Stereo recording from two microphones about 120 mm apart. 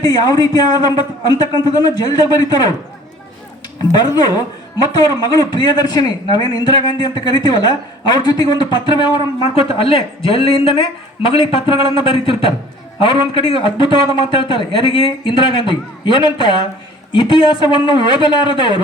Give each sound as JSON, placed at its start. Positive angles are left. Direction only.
{"t": 0.0, "sound": "a man's voice", "side_deg": 30}
{"t": 3.9, "sound": "a man's voice", "side_deg": 35}
{"t": 9.4, "sound": "a man's voice", "side_deg": 50}